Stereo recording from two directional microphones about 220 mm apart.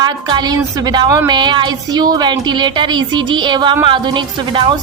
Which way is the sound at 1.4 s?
20° right (ahead or behind).